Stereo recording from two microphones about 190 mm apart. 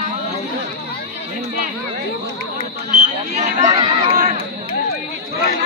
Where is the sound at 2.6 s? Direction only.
40° right (ahead or behind).